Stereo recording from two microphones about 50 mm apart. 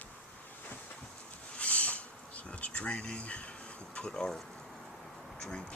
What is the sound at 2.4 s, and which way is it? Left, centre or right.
Speech, left.